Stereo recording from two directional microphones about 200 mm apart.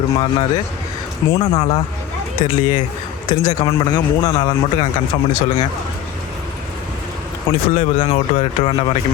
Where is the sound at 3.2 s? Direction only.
20° left (ahead or behind).